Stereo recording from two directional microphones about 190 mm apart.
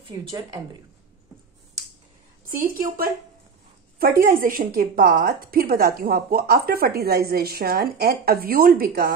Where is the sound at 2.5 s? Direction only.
50° right (ahead or behind).